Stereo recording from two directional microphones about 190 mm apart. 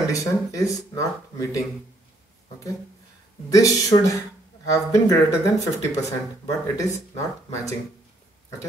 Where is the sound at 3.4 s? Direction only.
15° left (ahead or behind).